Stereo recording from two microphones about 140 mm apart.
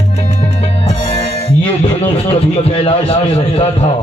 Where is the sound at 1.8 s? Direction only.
40° left (ahead or behind).